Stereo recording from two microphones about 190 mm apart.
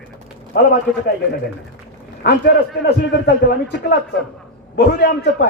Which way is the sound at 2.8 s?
60° left (ahead or behind).